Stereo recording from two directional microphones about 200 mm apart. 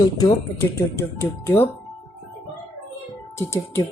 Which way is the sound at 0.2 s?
15° left (ahead or behind).